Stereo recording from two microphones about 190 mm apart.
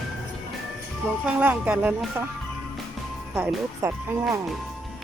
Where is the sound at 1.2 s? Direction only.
10° right (ahead or behind).